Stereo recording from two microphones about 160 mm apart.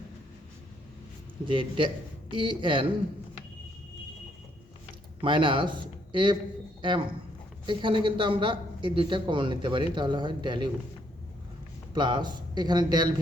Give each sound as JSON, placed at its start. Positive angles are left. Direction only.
{"t": 1.5, "sound": "speech", "side_deg": -30}
{"t": 5.2, "sound": "a man's voice", "side_deg": -30}
{"t": 11.9, "sound": "a man's voice", "side_deg": -30}